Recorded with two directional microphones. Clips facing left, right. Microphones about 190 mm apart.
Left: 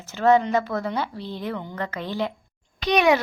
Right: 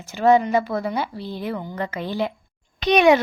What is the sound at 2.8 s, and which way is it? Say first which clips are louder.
Speech: right 4 dB; 20° right (ahead or behind).